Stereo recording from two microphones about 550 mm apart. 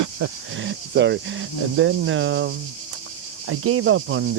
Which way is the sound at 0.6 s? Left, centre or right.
Centre.